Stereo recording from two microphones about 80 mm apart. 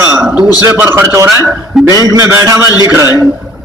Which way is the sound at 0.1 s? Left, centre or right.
Right.